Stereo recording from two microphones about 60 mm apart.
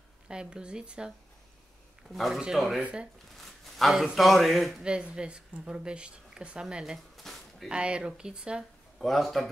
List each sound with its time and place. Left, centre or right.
0.3 s speech: centre
2.0 s speech: centre
2.8 s speech: centre
3.3 s a sound: centre
3.9 s speech: centre
4.8 s speech: centre
7.2 s a sound: centre
7.6 s speech: centre
8.9 s a man's voice: centre